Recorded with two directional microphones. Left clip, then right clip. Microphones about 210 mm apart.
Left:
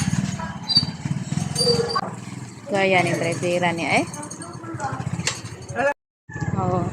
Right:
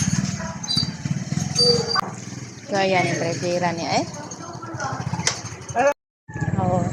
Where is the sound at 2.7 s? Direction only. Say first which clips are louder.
Left 1 dB; 15° left (ahead or behind).